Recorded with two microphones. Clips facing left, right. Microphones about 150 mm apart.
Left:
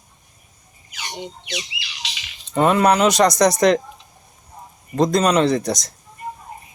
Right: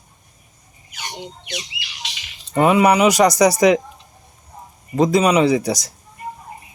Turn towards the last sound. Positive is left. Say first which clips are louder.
# right 2 dB
turn(degrees=-10)  # may be behind; listen again after turning